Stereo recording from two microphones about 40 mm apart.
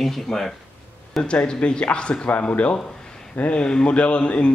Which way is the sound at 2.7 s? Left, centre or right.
Centre.